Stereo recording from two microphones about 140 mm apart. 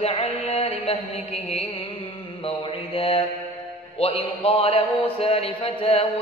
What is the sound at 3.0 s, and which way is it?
A man's voice, 40° left (ahead or behind).